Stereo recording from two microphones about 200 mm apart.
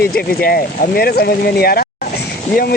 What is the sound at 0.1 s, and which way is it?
Speech, 50° left (ahead or behind).